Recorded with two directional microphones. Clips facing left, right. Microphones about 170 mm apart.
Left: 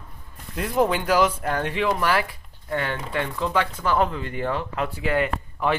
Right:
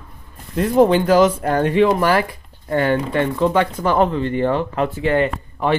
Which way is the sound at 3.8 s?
30° right (ahead or behind).